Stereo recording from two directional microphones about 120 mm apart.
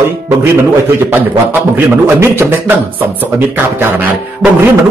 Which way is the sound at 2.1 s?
20° right (ahead or behind).